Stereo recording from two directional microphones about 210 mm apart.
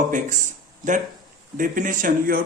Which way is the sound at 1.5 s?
40° right (ahead or behind).